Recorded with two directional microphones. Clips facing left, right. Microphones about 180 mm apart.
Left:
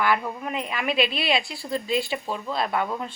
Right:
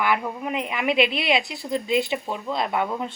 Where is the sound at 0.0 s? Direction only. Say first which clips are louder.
Even; 15° right (ahead or behind).